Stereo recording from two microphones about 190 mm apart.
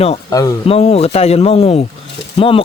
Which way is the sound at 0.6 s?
30° left (ahead or behind).